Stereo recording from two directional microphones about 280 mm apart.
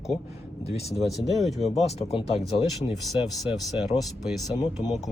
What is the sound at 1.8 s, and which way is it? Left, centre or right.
Speech, left.